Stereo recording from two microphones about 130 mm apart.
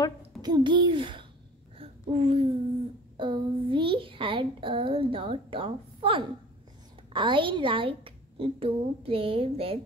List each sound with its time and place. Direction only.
0.4 s speech: 35° right (ahead or behind)
1.8 s a sound: 45° right (ahead or behind)
3.2 s a child's voice: 40° right (ahead or behind)